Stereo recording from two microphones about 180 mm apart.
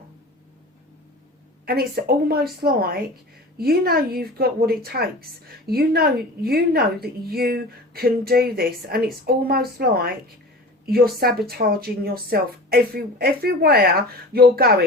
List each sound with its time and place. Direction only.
1.6 s speech: 55° right (ahead or behind)